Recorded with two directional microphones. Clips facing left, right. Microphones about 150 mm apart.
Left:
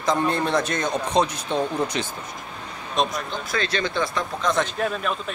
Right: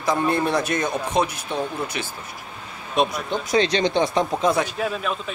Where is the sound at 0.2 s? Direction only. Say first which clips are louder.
Right 1 dB; 10° right (ahead or behind).